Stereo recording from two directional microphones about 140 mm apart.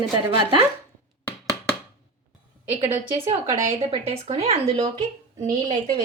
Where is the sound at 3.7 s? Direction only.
40° right (ahead or behind).